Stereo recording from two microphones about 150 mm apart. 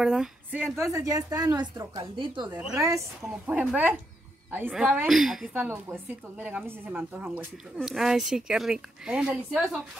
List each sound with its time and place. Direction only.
0.0 s speech: 5° right (ahead or behind)
0.8 s a woman's voice: 20° right (ahead or behind)
2.1 s speech: 30° right (ahead or behind)
2.5 s a woman's voice: 5° right (ahead or behind)
5.5 s a woman's voice: 15° right (ahead or behind)